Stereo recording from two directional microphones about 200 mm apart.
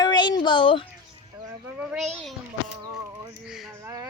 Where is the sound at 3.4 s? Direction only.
Centre (ahead or behind).